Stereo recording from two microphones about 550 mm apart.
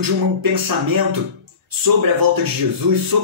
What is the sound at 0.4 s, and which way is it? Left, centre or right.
Speech, right.